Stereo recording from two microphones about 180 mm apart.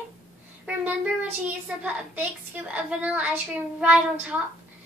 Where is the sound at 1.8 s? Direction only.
10° right (ahead or behind).